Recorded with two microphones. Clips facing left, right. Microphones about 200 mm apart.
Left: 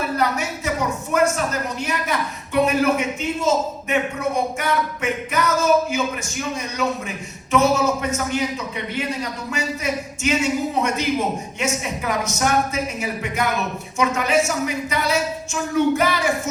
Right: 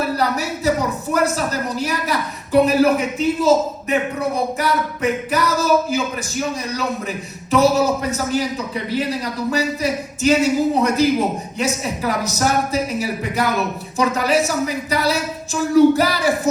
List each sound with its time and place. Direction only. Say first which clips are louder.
0.2 s a sound: right 2 dB; 35° right (ahead or behind)
1.1 s a man's voice: even; 35° right (ahead or behind)
7.5 s a man's voice: right 3 dB; 35° right (ahead or behind)
9.5 s a man's voice: right 5 dB; 35° right (ahead or behind)